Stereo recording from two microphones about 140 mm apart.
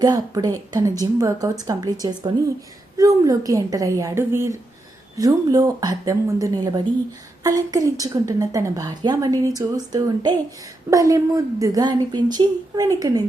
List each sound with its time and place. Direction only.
0.0 s a woman's voice: 25° right (ahead or behind)